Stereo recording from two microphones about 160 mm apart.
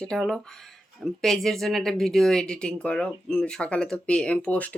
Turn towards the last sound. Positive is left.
turn(degrees=10)  # may be behind; listen again after turning